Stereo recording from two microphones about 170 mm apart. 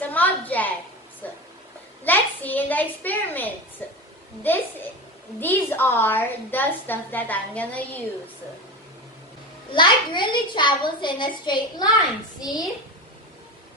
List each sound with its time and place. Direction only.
0.0 s a sound: 10° left (ahead or behind)
2.0 s a child's voice: 10° left (ahead or behind)
9.7 s a child's voice: 30° left (ahead or behind)